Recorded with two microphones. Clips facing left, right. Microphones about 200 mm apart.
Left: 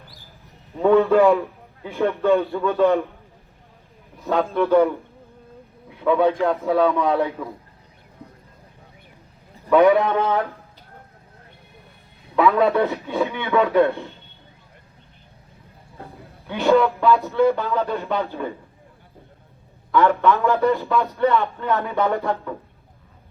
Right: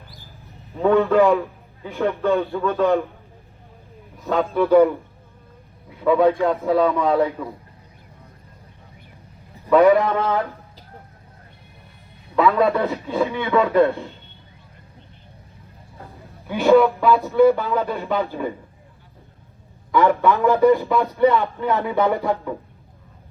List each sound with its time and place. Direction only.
0.7 s a man's voice: centre (ahead or behind)
4.2 s a man's voice: centre (ahead or behind)
6.0 s a man's voice: centre (ahead or behind)
9.6 s a man's voice: centre (ahead or behind)
12.4 s a man's voice: centre (ahead or behind)
17.0 s speech: 15° right (ahead or behind)
18.0 s a man's voice: centre (ahead or behind)
18.3 s speech: 10° right (ahead or behind)
19.9 s speech: 15° right (ahead or behind)